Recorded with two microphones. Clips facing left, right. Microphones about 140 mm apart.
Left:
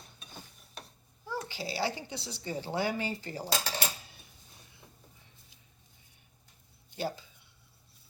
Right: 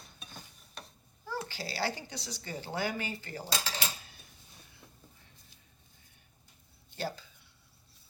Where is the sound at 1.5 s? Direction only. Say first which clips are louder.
Left 3 dB; 20° left (ahead or behind).